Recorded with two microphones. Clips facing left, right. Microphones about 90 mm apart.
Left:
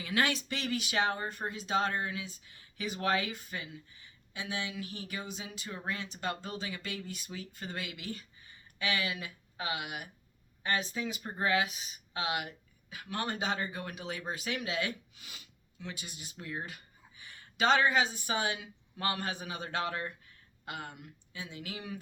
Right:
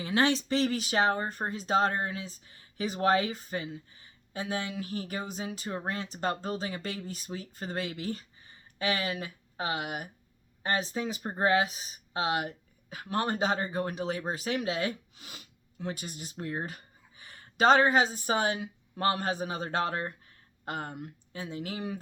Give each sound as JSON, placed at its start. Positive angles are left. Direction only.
{"t": 0.0, "sound": "speech", "side_deg": -30}